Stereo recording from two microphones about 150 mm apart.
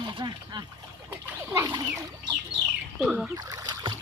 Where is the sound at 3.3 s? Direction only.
25° right (ahead or behind).